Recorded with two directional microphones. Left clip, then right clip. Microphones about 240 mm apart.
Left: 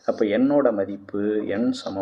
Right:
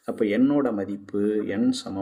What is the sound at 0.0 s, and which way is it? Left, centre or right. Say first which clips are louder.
Speech: left 2 dB; right.